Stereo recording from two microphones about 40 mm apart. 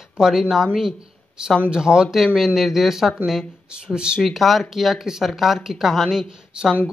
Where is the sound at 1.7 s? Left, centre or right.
Centre.